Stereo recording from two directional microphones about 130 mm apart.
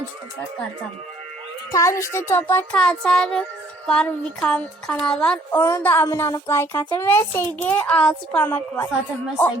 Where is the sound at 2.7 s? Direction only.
5° left (ahead or behind).